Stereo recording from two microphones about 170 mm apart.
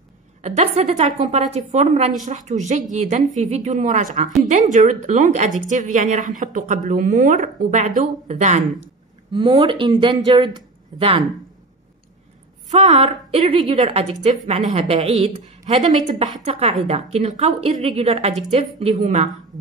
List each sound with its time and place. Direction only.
0.4 s a woman's voice: 40° right (ahead or behind)
9.3 s speech: 30° right (ahead or behind)
12.6 s a woman's voice: 40° right (ahead or behind)